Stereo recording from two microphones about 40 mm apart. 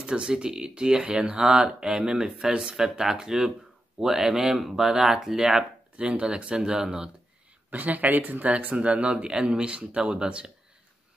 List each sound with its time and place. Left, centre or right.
0.0 s speech: right
5.9 s speech: right
7.7 s speech: right
9.1 s speech: centre